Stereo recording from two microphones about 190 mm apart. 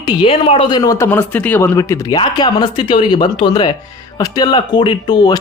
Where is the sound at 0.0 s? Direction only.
25° left (ahead or behind).